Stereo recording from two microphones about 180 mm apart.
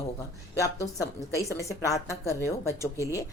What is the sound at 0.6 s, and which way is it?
A woman's voice, 20° left (ahead or behind).